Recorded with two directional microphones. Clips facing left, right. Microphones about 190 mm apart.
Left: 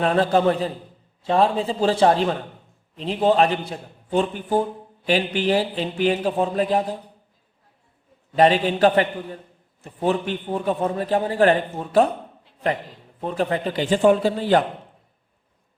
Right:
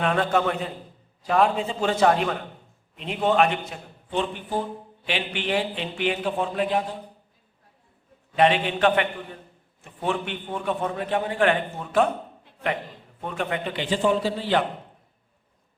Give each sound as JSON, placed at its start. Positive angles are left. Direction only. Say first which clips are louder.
{"t": 0.0, "sound": "a man's voice", "louder": "left 4 dB", "side_deg": 35}
{"t": 8.4, "sound": "a man's voice", "louder": "left 4 dB", "side_deg": 35}
{"t": 13.2, "sound": "speech", "louder": "left 5 dB", "side_deg": 35}